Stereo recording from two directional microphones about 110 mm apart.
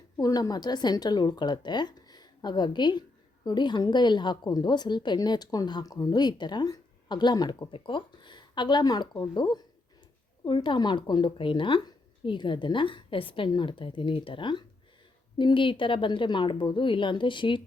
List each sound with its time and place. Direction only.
0.2 s a woman's voice: 35° left (ahead or behind)
7.7 s a woman's voice: 50° left (ahead or behind)